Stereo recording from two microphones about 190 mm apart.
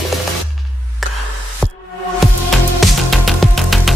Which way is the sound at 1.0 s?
Centre (ahead or behind).